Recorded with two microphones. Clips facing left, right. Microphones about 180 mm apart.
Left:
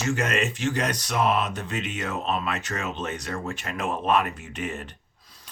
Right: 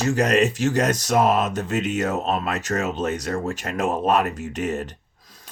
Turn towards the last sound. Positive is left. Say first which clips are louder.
# right 7 dB
turn(degrees=-45)  # may be behind; listen again after turning